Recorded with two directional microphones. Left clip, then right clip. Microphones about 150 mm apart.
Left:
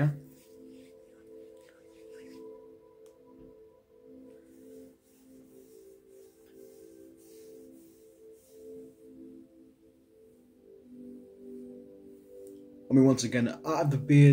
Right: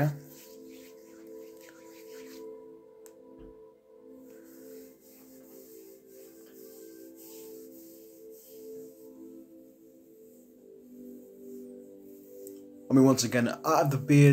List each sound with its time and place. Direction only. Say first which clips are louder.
12.8 s speech: right 1 dB; 20° left (ahead or behind)